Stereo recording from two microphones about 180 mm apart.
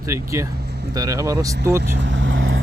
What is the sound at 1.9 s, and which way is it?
Vehicle, 90° right.